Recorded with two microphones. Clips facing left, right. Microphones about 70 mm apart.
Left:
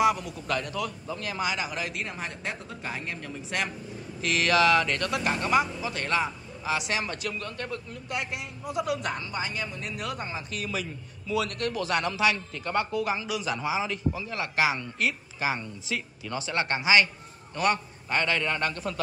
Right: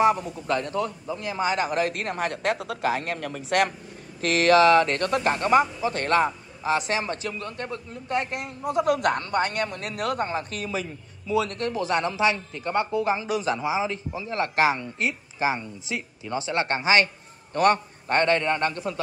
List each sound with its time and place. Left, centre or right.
0.0 s a man's voice: right
1.5 s speech: right
4.2 s speech: right
10.7 s a man's voice: right
13.6 s a man's voice: right
14.8 s a man's voice: right
18.4 s a man's voice: right